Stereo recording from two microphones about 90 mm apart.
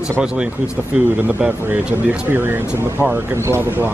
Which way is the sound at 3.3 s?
30° right (ahead or behind).